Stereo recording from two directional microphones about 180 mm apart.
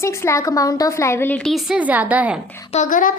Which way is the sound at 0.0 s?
15° left (ahead or behind).